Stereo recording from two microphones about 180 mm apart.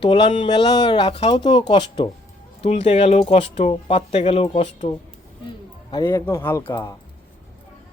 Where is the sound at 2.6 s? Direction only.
40° left (ahead or behind).